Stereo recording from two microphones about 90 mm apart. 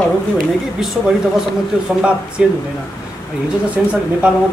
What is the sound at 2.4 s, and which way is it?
Speech, 10° right (ahead or behind).